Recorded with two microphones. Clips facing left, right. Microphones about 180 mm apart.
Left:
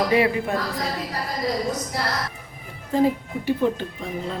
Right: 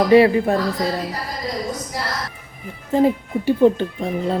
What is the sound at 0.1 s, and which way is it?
Speech, 35° right (ahead or behind).